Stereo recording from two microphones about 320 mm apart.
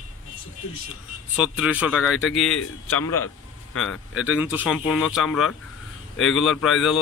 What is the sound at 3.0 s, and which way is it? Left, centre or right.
Speech, left.